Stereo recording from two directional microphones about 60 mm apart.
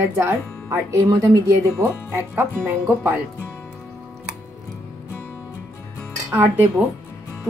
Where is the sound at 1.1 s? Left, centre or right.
Right.